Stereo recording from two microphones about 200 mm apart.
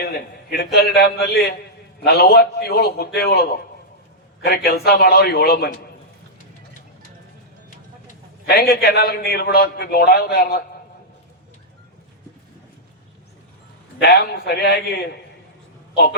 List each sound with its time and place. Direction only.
0.0 s a man's voice: 55° left (ahead or behind)
4.4 s a man's voice: 50° left (ahead or behind)
8.4 s a man's voice: 50° left (ahead or behind)
14.0 s a man's voice: 50° left (ahead or behind)